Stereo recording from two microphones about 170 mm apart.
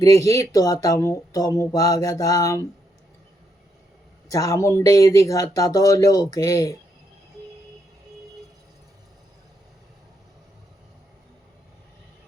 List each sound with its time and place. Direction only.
0.0 s speech: 20° left (ahead or behind)
4.3 s speech: 20° left (ahead or behind)